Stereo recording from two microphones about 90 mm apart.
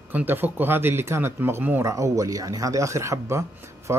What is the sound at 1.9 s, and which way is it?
Speech, 35° right (ahead or behind).